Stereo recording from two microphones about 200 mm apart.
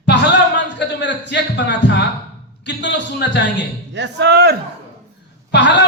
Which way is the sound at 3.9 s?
60° right (ahead or behind).